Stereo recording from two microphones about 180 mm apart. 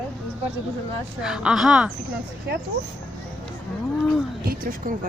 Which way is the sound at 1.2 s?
5° right (ahead or behind).